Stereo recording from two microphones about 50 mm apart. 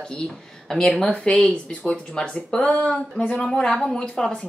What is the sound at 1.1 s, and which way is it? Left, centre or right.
A woman's voice, left.